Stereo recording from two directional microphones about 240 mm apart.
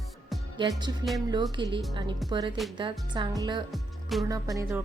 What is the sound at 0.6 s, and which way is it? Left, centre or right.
Speech, centre.